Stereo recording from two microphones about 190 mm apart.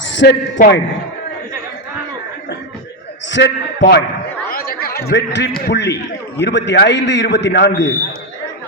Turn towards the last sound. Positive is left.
turn(degrees=60)  # may be behind; listen again after turning